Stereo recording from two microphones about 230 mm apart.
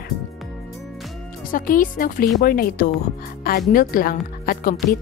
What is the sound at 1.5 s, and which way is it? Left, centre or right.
Speech, left.